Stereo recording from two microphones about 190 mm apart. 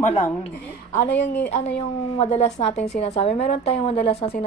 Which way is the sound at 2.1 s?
30° left (ahead or behind).